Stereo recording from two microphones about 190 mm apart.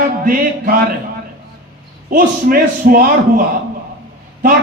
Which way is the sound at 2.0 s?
50° right (ahead or behind).